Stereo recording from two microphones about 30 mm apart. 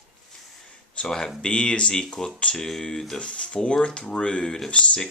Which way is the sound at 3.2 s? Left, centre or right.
Left.